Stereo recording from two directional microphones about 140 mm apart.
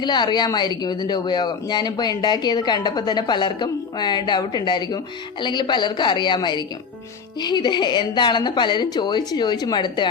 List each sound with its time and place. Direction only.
0.0 s speech: 30° left (ahead or behind)